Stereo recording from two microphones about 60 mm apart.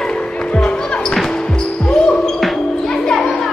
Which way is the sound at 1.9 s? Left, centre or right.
Centre.